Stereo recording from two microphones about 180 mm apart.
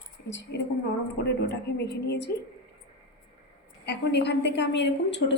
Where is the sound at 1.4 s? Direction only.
65° left (ahead or behind).